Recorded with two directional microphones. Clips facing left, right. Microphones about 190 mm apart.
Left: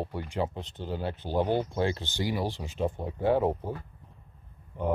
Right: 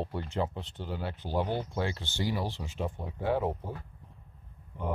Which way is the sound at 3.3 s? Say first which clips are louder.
Left 4 dB; 35° left (ahead or behind).